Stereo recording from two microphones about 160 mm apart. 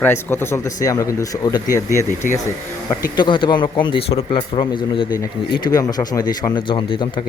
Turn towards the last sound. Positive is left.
turn(degrees=30)  # may be behind; listen again after turning